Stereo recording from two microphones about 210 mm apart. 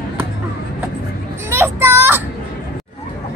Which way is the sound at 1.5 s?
10° right (ahead or behind).